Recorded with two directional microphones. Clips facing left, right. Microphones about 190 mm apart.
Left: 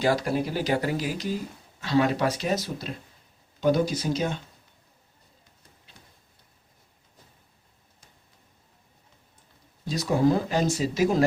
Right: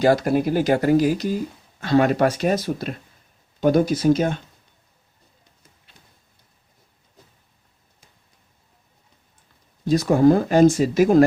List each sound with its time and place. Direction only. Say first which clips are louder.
0.0 s speech: right 7 dB; 45° right (ahead or behind)
9.8 s speech: right 7 dB; 50° right (ahead or behind)